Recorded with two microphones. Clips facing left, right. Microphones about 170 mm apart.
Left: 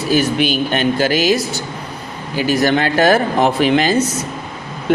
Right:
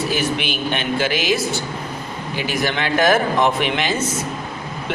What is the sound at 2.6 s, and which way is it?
Speech, 40° left (ahead or behind).